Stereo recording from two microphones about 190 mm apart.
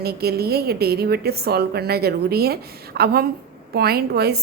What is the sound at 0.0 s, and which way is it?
A woman's voice, 55° right (ahead or behind).